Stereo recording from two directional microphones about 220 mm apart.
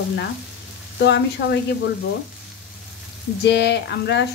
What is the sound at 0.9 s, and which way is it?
Speech, 50° left (ahead or behind).